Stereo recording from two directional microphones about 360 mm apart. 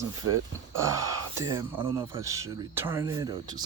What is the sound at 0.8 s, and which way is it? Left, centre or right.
Speech, centre.